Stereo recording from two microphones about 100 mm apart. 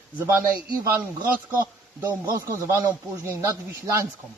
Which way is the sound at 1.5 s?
25° right (ahead or behind).